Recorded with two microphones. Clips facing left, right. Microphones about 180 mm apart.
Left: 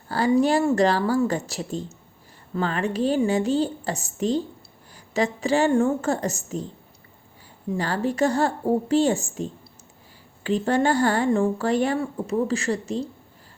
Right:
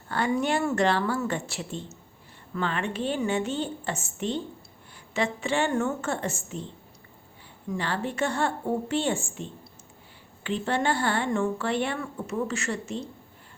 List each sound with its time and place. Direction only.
0.3 s speech: 35° left (ahead or behind)
7.7 s speech: 40° left (ahead or behind)